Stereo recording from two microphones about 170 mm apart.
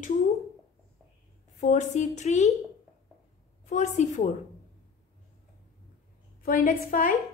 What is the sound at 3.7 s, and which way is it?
Speech, 45° left (ahead or behind).